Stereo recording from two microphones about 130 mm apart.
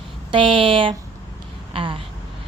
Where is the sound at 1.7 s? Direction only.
40° right (ahead or behind).